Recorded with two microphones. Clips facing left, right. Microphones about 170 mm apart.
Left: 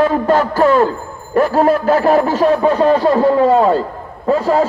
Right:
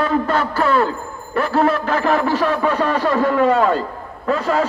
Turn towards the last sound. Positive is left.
turn(degrees=40)  # may be behind; listen again after turning